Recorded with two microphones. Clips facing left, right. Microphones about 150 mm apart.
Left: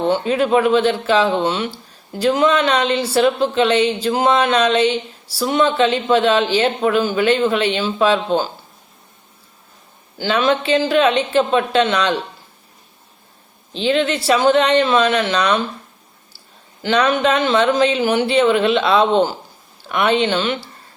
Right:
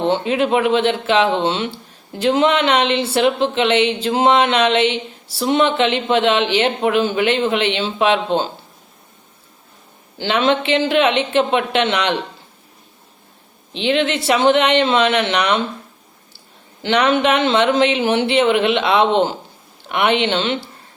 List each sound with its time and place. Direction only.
0.0 s speech: 20° right (ahead or behind)
10.2 s speech: 25° right (ahead or behind)
13.7 s speech: 20° right (ahead or behind)
16.8 s speech: 20° right (ahead or behind)